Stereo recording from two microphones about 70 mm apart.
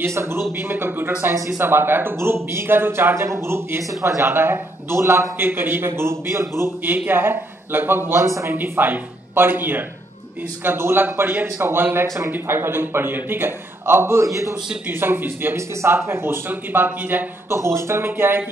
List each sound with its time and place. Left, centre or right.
0.0 s a man's voice: right
1.3 s speech: right
1.6 s a man's voice: right
6.8 s a man's voice: right
8.1 s speech: right
8.5 s a man's voice: right
14.9 s a man's voice: right
15.7 s a man's voice: right
17.5 s a man's voice: right